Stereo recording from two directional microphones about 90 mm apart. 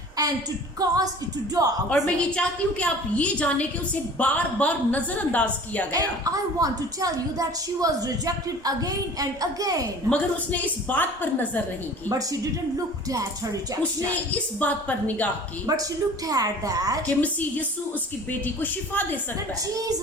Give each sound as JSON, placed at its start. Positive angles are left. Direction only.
{"t": 0.2, "sound": "a woman's voice", "side_deg": -45}
{"t": 1.9, "sound": "a woman's voice", "side_deg": 15}
{"t": 5.9, "sound": "a woman's voice", "side_deg": -40}
{"t": 10.1, "sound": "a woman's voice", "side_deg": 15}
{"t": 12.0, "sound": "speech", "side_deg": -40}
{"t": 14.1, "sound": "a woman's voice", "side_deg": 15}
{"t": 15.6, "sound": "a woman's voice", "side_deg": -45}
{"t": 17.1, "sound": "a woman's voice", "side_deg": 15}
{"t": 19.7, "sound": "speech", "side_deg": -40}